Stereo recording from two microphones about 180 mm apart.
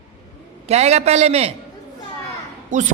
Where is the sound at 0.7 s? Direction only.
35° right (ahead or behind).